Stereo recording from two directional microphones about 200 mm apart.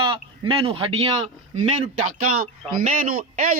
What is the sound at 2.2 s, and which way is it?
Speech, 45° right (ahead or behind).